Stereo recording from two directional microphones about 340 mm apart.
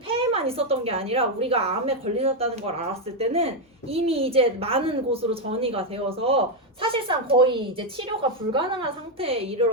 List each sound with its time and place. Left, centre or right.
0.2 s a woman's voice: centre